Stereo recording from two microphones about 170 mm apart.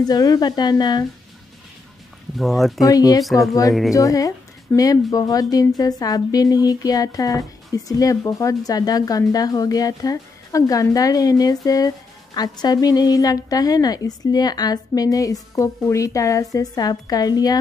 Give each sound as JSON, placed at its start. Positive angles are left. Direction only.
{"t": 0.1, "sound": "a woman's voice", "side_deg": 25}
{"t": 2.3, "sound": "speech", "side_deg": 0}
{"t": 2.8, "sound": "a woman's voice", "side_deg": 20}